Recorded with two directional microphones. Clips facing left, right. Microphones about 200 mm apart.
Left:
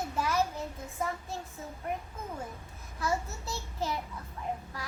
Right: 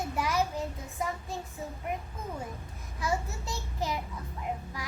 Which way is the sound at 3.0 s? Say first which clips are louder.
Even; 15° right (ahead or behind).